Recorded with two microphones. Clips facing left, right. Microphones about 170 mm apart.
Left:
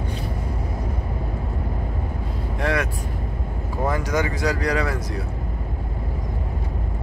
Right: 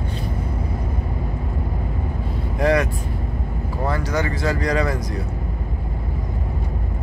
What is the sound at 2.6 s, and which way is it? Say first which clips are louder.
Speech: right 5 dB; 5° left (ahead or behind).